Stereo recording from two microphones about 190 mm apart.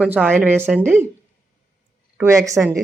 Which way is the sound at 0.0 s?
5° right (ahead or behind).